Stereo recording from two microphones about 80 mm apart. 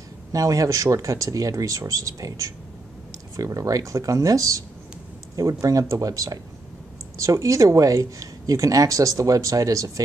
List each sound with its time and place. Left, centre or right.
0.3 s speech: right